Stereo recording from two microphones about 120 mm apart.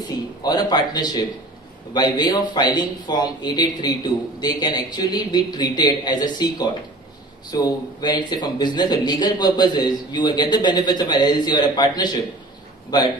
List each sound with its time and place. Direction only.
0.4 s speech: 35° left (ahead or behind)